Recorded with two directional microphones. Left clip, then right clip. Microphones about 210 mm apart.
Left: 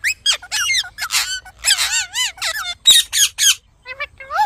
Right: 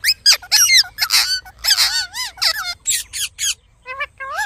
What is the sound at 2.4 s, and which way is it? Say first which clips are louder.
Squeak: right 3 dB; 15° right (ahead or behind).